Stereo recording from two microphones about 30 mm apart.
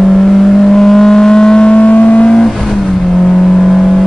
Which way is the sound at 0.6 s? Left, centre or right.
Centre.